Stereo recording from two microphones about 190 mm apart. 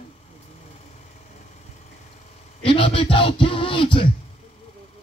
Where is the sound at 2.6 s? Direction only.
30° left (ahead or behind).